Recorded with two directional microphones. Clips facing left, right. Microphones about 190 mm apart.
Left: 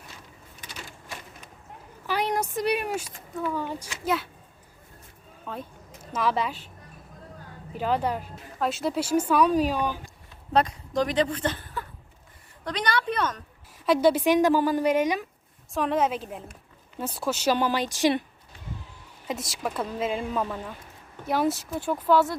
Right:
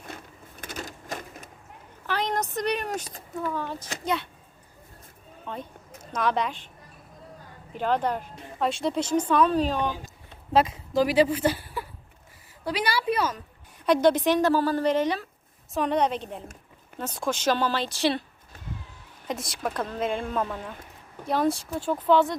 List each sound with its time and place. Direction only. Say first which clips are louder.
0.6 s a sound: right 7 dB; 45° right (ahead or behind)
2.0 s a woman's voice: left 1 dB; 10° left (ahead or behind)
5.5 s speech: even; 5° left (ahead or behind)
7.7 s a woman's voice: right 1 dB; 5° left (ahead or behind)
10.5 s a woman's voice: right 1 dB; 5° right (ahead or behind)
13.8 s a woman's voice: even; 5° left (ahead or behind)
15.7 s a woman's voice: even; centre (ahead or behind)
19.3 s speech: even; centre (ahead or behind)